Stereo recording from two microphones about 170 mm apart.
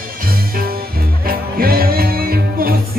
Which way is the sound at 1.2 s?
60° right (ahead or behind).